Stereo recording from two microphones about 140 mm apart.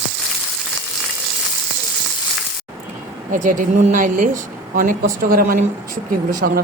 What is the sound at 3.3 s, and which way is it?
A woman's voice, 65° right (ahead or behind).